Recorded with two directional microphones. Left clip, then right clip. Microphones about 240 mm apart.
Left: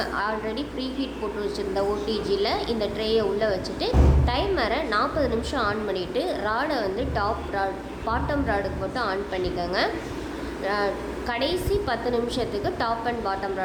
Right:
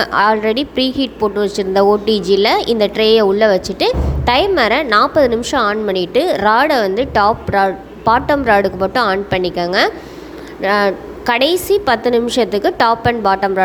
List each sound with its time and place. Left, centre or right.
0.0 s a woman's voice: right